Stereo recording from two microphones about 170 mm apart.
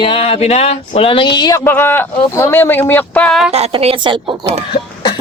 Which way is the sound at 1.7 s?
10° left (ahead or behind).